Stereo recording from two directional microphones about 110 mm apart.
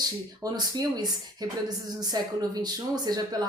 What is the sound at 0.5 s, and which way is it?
A woman's voice, 35° right (ahead or behind).